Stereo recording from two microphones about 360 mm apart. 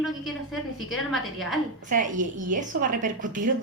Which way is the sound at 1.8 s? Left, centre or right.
Right.